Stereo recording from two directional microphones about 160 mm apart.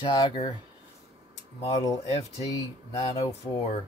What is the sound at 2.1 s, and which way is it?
Speech, 40° left (ahead or behind).